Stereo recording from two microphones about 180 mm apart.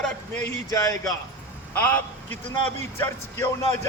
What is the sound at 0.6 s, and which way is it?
A man's voice, 15° left (ahead or behind).